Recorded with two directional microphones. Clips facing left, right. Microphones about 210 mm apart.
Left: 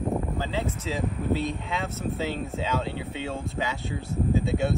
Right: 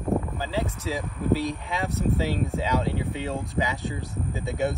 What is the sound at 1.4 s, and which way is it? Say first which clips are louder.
Speech: right 1 dB; 15° right (ahead or behind).